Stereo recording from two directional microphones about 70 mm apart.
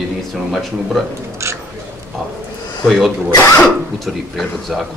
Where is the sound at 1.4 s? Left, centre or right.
Right.